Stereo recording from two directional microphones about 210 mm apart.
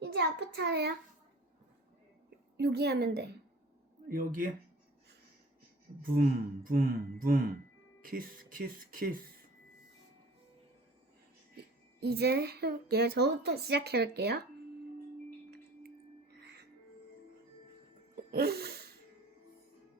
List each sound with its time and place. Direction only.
0.0 s a child's voice: 55° right (ahead or behind)
2.6 s speech: 50° right (ahead or behind)
6.0 s speech: 45° right (ahead or behind)
11.5 s speech: 50° right (ahead or behind)
15.4 s music: 50° right (ahead or behind)
18.3 s a sound: 50° right (ahead or behind)